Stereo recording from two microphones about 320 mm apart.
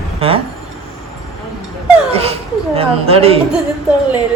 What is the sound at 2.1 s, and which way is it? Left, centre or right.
Speech, centre.